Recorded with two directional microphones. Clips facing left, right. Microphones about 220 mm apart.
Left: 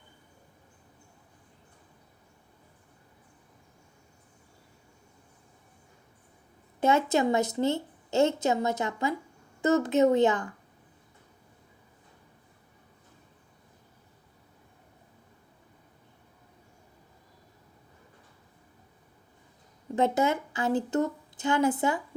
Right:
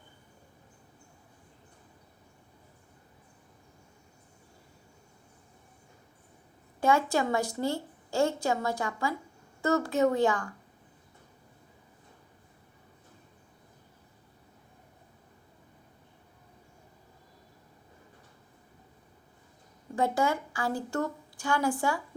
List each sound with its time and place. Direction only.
6.7 s a woman's voice: 20° left (ahead or behind)
20.0 s a woman's voice: 20° left (ahead or behind)